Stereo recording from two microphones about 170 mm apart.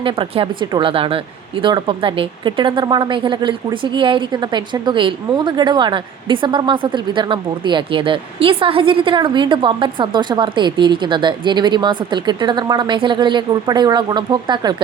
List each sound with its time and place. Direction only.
0.0 s a woman's voice: 30° right (ahead or behind)